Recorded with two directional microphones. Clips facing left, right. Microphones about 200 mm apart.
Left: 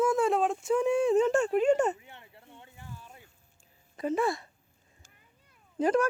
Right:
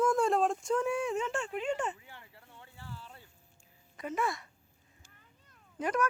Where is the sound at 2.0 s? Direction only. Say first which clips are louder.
Left 2 dB; 25° left (ahead or behind).